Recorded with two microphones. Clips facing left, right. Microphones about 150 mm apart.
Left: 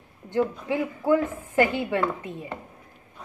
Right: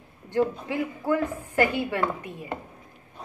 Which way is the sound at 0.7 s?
15° left (ahead or behind).